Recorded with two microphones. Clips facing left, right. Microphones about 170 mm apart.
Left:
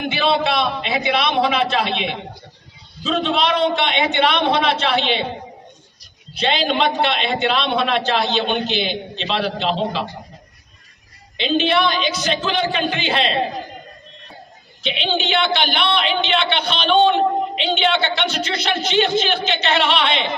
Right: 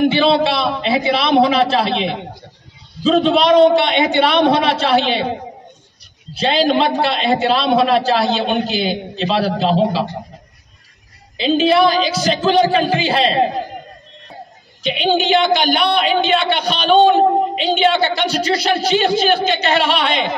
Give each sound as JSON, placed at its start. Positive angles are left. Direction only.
{"t": 0.1, "sound": "a man's voice", "side_deg": -30}
{"t": 6.4, "sound": "a man's voice", "side_deg": -40}
{"t": 11.3, "sound": "a man's voice", "side_deg": -35}
{"t": 14.9, "sound": "a man's voice", "side_deg": -45}
{"t": 16.8, "sound": "music", "side_deg": -40}
{"t": 17.7, "sound": "a man's voice", "side_deg": -40}